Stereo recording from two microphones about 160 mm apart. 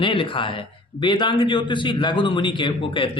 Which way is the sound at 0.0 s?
35° left (ahead or behind).